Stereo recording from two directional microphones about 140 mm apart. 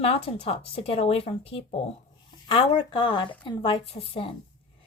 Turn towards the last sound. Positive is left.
turn(degrees=40)  # may be behind; listen again after turning